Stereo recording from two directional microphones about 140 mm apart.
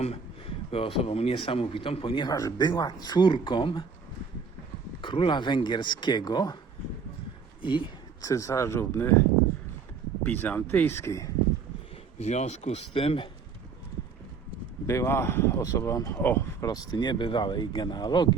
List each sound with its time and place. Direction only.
0.0 s a man's voice: 45° left (ahead or behind)
5.0 s a man's voice: 35° left (ahead or behind)
7.6 s speech: 35° left (ahead or behind)
8.2 s speech: 25° left (ahead or behind)
10.2 s speech: 10° left (ahead or behind)
12.2 s speech: 55° left (ahead or behind)
14.8 s speech: 20° left (ahead or behind)